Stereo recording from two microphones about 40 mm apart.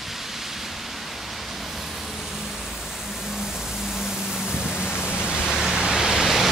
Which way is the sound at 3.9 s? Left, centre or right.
Centre.